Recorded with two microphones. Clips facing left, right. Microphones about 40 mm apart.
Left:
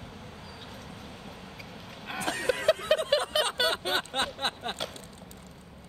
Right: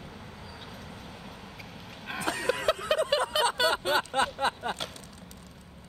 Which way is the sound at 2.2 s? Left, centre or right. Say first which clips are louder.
Even; left.